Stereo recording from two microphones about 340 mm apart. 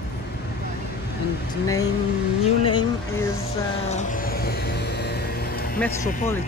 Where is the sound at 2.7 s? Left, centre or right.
Centre.